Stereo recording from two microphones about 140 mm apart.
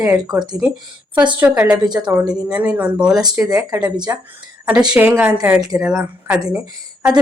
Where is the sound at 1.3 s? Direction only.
10° right (ahead or behind).